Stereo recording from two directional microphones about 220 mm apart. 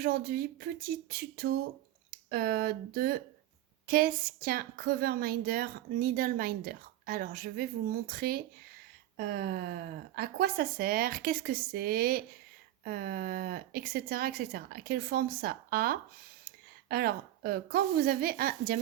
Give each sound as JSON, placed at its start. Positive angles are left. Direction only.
{"t": 0.0, "sound": "a woman's voice", "side_deg": -40}